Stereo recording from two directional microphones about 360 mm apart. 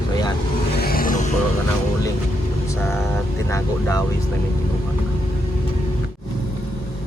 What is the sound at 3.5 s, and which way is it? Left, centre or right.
Vehicle, centre.